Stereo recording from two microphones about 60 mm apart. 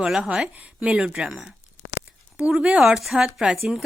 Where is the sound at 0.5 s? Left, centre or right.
Right.